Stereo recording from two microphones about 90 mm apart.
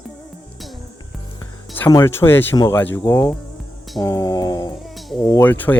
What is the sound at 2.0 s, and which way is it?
Speech, 25° left (ahead or behind).